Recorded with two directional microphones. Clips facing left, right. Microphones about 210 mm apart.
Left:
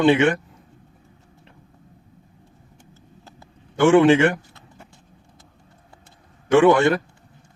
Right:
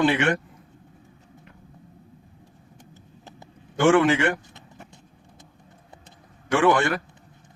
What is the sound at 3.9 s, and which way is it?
Speech, 25° left (ahead or behind).